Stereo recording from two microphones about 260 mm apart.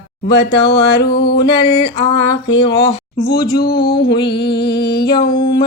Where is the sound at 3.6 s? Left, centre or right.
Left.